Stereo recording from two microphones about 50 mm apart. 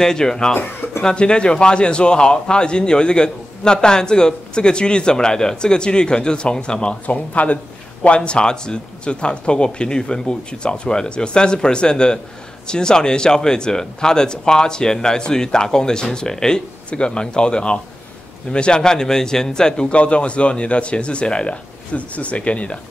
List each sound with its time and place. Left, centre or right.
0.0 s a man's voice: centre